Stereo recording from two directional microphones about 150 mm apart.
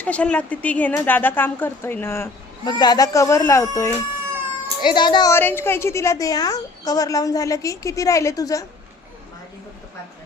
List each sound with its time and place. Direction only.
0.0 s speech: 10° left (ahead or behind)
2.6 s a woman's voice: 30° left (ahead or behind)
4.8 s speech: 30° left (ahead or behind)
5.3 s a woman's voice: 15° left (ahead or behind)